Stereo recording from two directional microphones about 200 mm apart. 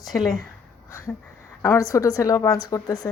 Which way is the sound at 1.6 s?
15° left (ahead or behind).